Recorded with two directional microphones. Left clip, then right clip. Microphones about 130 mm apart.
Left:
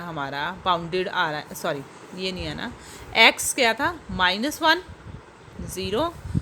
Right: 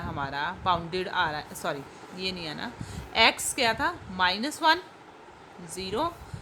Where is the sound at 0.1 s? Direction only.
20° left (ahead or behind).